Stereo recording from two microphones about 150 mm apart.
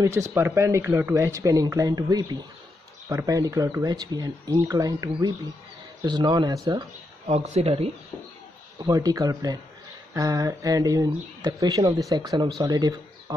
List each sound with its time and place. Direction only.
0.0 s speech: 20° right (ahead or behind)
7.2 s speech: 45° right (ahead or behind)
8.7 s speech: 25° right (ahead or behind)